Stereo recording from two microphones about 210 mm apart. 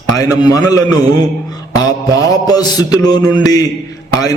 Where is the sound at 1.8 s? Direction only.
20° left (ahead or behind).